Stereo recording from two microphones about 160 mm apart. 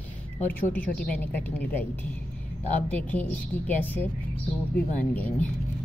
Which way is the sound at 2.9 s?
10° left (ahead or behind).